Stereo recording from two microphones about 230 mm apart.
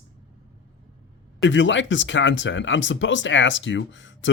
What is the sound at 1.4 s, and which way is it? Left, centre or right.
Speech, left.